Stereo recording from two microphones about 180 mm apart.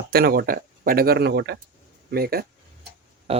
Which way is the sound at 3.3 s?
35° right (ahead or behind).